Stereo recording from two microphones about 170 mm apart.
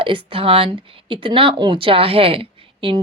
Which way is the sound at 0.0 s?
30° right (ahead or behind).